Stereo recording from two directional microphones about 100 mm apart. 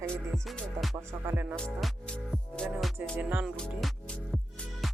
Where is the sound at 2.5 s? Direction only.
10° left (ahead or behind).